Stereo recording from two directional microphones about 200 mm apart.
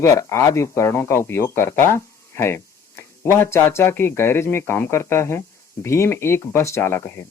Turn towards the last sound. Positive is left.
turn(degrees=10)  # may be behind; listen again after turning